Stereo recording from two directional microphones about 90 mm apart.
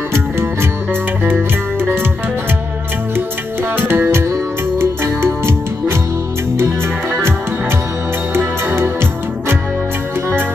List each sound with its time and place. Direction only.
0.1 s music: 30° right (ahead or behind)
3.7 s music: 20° right (ahead or behind)
8.4 s music: 25° right (ahead or behind)